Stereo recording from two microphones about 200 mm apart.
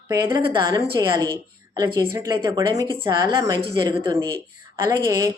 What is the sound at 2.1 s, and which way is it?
A woman's voice, 15° right (ahead or behind).